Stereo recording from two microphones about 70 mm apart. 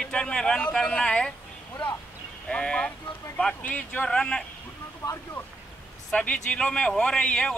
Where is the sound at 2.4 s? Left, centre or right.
Centre.